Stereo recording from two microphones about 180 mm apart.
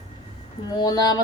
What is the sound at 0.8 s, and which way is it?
Speech, 20° left (ahead or behind).